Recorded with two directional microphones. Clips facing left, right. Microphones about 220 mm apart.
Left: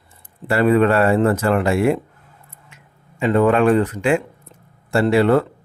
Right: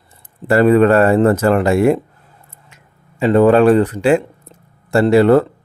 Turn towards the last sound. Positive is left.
turn(degrees=-40)  # may be behind; listen again after turning